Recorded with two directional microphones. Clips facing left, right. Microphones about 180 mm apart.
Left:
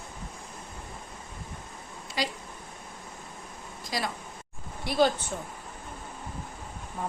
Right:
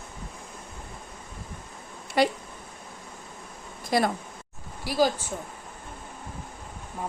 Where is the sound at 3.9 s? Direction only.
55° right (ahead or behind).